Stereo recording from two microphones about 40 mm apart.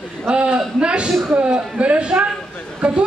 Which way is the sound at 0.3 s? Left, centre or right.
Right.